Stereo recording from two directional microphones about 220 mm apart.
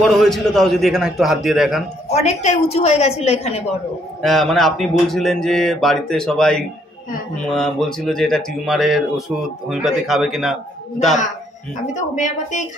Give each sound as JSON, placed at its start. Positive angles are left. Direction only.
{"t": 0.0, "sound": "speech", "side_deg": 0}
{"t": 2.1, "sound": "a woman's voice", "side_deg": 30}
{"t": 4.2, "sound": "speech", "side_deg": 0}
{"t": 11.8, "sound": "a woman's voice", "side_deg": 35}